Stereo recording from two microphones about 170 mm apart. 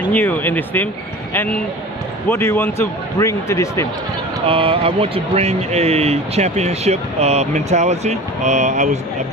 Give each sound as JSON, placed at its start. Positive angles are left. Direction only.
{"t": 0.1, "sound": "speech", "side_deg": 10}
{"t": 2.2, "sound": "speech", "side_deg": 15}
{"t": 4.5, "sound": "speech", "side_deg": -30}